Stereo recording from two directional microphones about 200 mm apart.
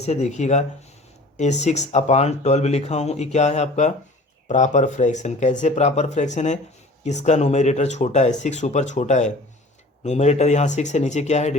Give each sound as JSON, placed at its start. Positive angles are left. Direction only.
{"t": 0.0, "sound": "speech", "side_deg": 35}